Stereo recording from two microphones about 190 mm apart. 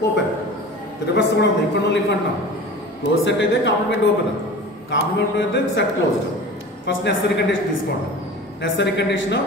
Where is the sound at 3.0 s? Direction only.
70° left (ahead or behind).